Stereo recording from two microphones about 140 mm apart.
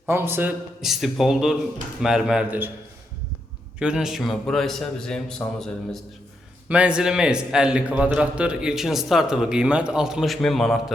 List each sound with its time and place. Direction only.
0.1 s a man's voice: 15° right (ahead or behind)
0.8 s a man's voice: centre (ahead or behind)
3.8 s a man's voice: 5° right (ahead or behind)
6.7 s a man's voice: 10° right (ahead or behind)